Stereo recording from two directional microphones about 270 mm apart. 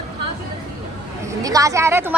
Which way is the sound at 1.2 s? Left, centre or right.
Centre.